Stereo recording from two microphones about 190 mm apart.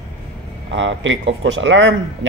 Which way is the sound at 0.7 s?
80° right.